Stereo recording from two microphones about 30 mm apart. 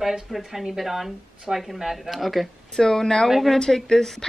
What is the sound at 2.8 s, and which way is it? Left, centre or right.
Speech, left.